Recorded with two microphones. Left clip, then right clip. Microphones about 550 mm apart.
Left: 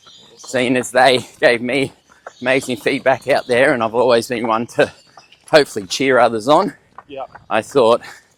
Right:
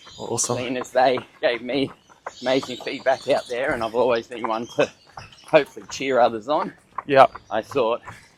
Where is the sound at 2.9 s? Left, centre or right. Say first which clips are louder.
Left 7 dB; left.